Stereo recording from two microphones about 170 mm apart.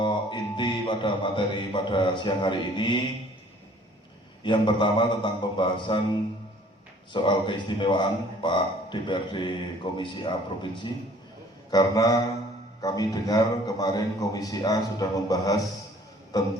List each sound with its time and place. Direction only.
0.0 s a sound: 25° left (ahead or behind)
1.7 s a man's voice: 30° left (ahead or behind)
4.4 s a man's voice: 30° left (ahead or behind)
7.1 s a man's voice: 30° left (ahead or behind)